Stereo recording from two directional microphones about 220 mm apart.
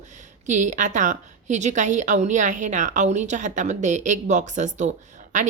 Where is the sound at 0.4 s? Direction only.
35° right (ahead or behind).